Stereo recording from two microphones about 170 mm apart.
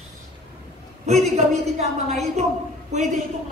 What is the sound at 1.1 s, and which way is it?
A woman's voice, 40° right (ahead or behind).